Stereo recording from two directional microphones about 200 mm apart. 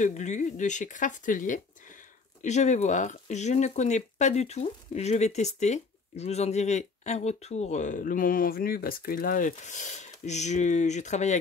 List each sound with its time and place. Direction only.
0.0 s speech: 35° left (ahead or behind)